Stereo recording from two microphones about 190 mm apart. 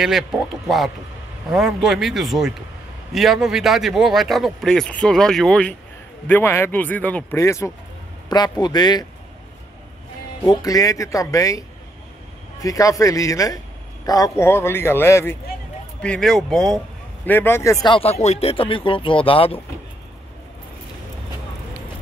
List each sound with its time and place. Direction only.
0.7 s a man's voice: centre (ahead or behind); by 9.0 s 20° left (ahead or behind)
10.4 s a man's voice: 20° left (ahead or behind)
17.8 s speech: 30° left (ahead or behind)